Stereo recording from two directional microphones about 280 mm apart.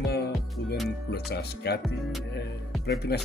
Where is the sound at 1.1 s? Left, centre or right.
Left.